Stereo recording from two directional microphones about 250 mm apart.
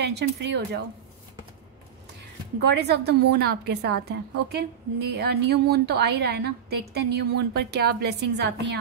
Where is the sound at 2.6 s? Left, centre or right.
Right.